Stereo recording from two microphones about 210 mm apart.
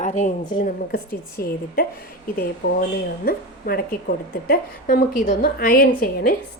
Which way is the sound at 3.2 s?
45° left (ahead or behind).